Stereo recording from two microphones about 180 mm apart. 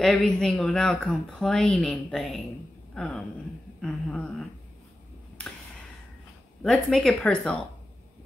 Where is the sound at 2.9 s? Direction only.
5° left (ahead or behind).